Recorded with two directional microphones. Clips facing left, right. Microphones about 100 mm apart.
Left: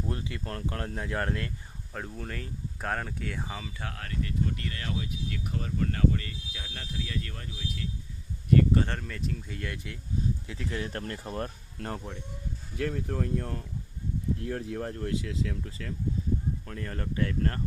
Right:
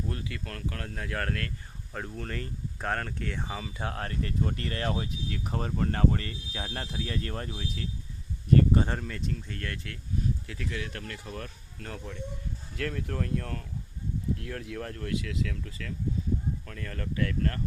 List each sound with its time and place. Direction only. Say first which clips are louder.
0.1 s speech: left 2 dB; 25° left (ahead or behind)
1.9 s speech: right 1 dB; centre (ahead or behind)
3.8 s speech: right 4 dB; 30° right (ahead or behind)
8.7 s speech: right 1 dB; 15° right (ahead or behind)
9.0 s speech: right 1 dB; centre (ahead or behind); by 10.8 s 20° left (ahead or behind)
10.8 s speech: left 3 dB; 35° left (ahead or behind)
12.7 s speech: left 2 dB; 15° left (ahead or behind)
14.4 s speech: left 4 dB; 30° left (ahead or behind)